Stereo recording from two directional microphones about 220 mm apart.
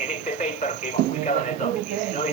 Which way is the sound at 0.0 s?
35° left (ahead or behind).